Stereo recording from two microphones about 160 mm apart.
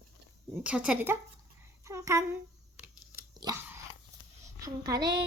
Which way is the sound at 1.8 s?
20° right (ahead or behind).